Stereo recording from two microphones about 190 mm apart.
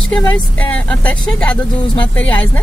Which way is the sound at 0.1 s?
10° left (ahead or behind).